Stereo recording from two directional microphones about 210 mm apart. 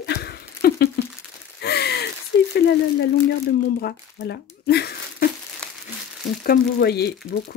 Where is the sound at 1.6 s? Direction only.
50° left (ahead or behind).